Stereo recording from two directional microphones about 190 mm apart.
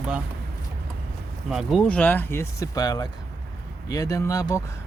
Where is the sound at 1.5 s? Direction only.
Centre (ahead or behind).